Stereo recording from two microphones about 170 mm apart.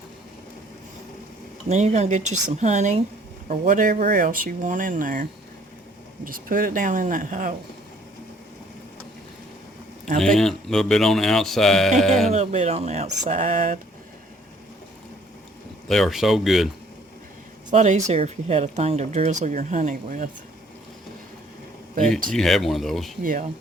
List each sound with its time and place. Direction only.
1.7 s speech: 40° right (ahead or behind)
6.2 s speech: 55° right (ahead or behind)
10.2 s speech: centre (ahead or behind)
12.3 s speech: 40° right (ahead or behind)
15.9 s speech: centre (ahead or behind)
17.7 s speech: 45° right (ahead or behind)
22.3 s speech: centre (ahead or behind)
23.2 s speech: 55° right (ahead or behind)